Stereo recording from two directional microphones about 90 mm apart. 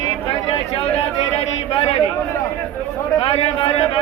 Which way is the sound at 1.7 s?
90° left.